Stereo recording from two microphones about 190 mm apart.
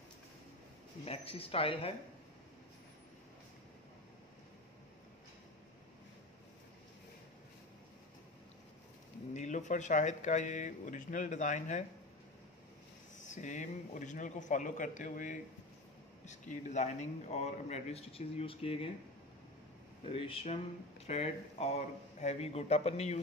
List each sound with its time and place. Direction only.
1.0 s speech: 30° left (ahead or behind)
9.3 s speech: 40° left (ahead or behind)
13.2 s speech: 40° left (ahead or behind)
20.1 s speech: 30° left (ahead or behind)